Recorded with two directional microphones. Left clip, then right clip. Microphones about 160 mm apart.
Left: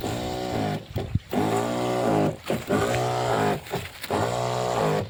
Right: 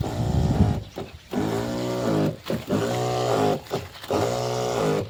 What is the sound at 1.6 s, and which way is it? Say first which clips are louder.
Vehicle: left 2 dB; 45° right (ahead or behind).